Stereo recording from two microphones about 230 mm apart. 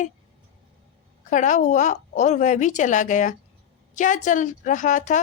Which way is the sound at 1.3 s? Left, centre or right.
Left.